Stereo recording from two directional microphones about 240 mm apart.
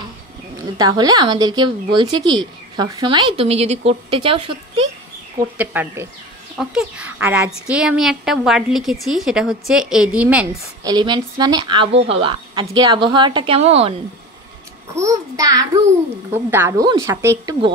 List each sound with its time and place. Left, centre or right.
0.6 s a woman's voice: centre
5.6 s a woman's voice: centre
10.8 s a woman's voice: centre
15.0 s a woman's voice: centre